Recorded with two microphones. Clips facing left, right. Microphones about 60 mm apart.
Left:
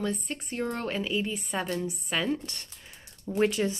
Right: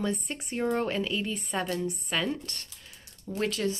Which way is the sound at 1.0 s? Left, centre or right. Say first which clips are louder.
Left 1 dB; centre.